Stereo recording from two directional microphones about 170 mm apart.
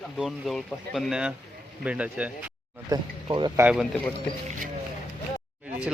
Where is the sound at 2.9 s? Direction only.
25° right (ahead or behind).